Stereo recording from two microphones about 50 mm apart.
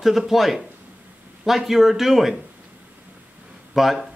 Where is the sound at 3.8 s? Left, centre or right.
Centre.